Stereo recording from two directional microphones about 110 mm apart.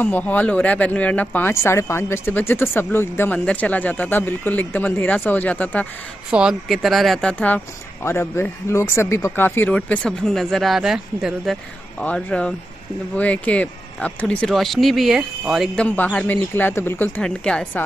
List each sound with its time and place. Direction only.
0.0 s speech: 15° left (ahead or behind)
1.5 s speech: 25° left (ahead or behind)
6.3 s speech: 5° right (ahead or behind)
12.0 s speech: 10° left (ahead or behind); by 15.7 s 5° right (ahead or behind)
15.7 s speech: 10° left (ahead or behind)